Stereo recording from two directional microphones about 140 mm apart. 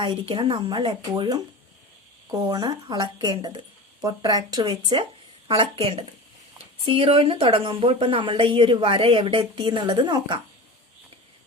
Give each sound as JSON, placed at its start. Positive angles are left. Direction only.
{"t": 0.0, "sound": "a woman's voice", "side_deg": -40}
{"t": 5.5, "sound": "a woman's voice", "side_deg": -45}